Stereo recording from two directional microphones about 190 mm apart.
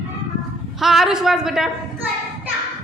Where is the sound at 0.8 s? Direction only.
Centre (ahead or behind).